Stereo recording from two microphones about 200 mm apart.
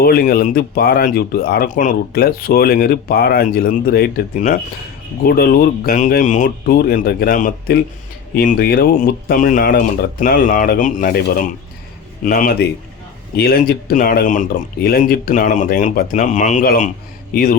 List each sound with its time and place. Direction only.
0.0 s speech: 50° left (ahead or behind)
12.2 s speech: 45° left (ahead or behind)